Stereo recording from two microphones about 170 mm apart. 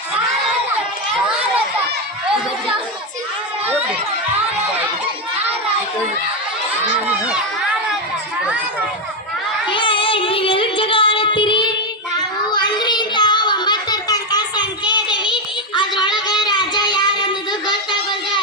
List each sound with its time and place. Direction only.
1.3 s children playing: 5° right (ahead or behind)
9.6 s child singing: 30° left (ahead or behind)